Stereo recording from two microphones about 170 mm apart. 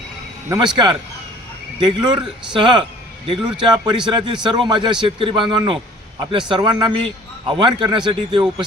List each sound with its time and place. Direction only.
0.5 s a man's voice: 25° right (ahead or behind)